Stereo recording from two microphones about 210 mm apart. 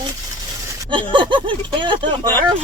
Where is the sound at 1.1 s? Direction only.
20° right (ahead or behind).